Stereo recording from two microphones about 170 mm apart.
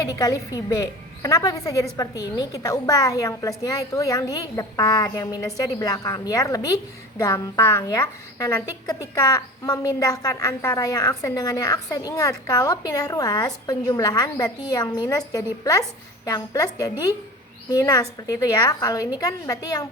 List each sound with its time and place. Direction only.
0.0 s a woman's voice: 20° left (ahead or behind)